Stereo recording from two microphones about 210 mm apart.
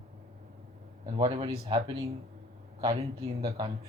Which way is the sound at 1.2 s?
20° right (ahead or behind).